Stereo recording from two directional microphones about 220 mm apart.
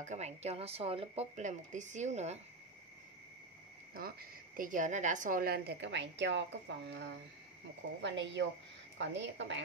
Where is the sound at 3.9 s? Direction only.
45° right (ahead or behind).